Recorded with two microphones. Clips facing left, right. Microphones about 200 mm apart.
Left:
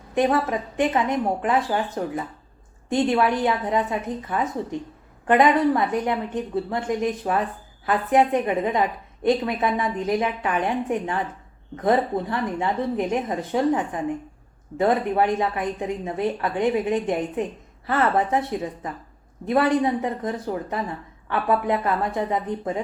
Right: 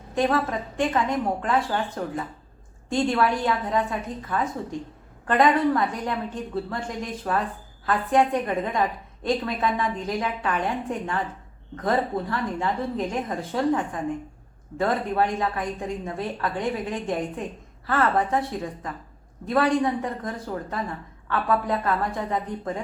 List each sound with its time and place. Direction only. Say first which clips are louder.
0.1 s a woman's voice: left 2 dB; 20° left (ahead or behind)